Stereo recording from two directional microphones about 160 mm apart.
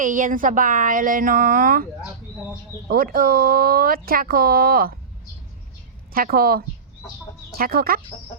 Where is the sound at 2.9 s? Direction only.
65° right (ahead or behind).